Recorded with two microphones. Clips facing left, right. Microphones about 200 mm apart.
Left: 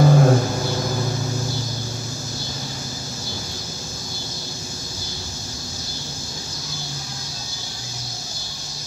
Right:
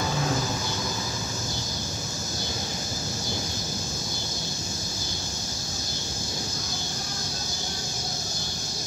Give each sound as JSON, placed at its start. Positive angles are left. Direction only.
{"t": 0.0, "sound": "vehicle", "side_deg": 55}